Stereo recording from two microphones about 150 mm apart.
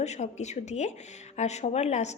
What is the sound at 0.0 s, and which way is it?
A woman's voice, 50° left (ahead or behind).